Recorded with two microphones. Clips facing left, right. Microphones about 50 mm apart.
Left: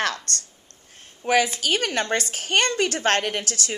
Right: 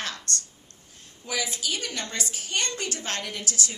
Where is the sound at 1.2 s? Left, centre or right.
Left.